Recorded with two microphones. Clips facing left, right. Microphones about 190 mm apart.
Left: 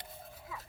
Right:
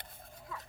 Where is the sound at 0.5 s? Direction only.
5° left (ahead or behind).